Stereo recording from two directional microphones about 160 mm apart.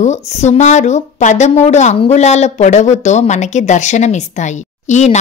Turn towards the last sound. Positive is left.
turn(degrees=45)  # may be behind; listen again after turning